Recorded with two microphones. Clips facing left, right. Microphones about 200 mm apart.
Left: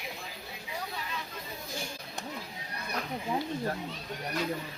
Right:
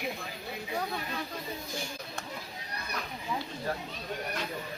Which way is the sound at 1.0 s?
50° right (ahead or behind).